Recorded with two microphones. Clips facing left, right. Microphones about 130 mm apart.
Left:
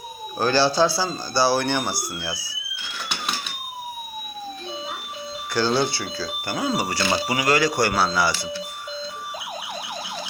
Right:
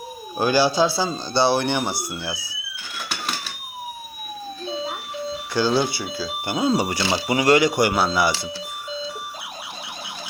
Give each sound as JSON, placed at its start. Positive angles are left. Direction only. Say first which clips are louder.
{"t": 0.3, "sound": "speech", "louder": "right 1 dB", "side_deg": -15}
{"t": 5.5, "sound": "speech", "louder": "right 1 dB", "side_deg": -10}